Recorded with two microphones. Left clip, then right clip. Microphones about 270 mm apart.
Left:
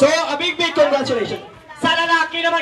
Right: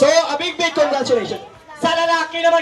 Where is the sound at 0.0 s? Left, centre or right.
Right.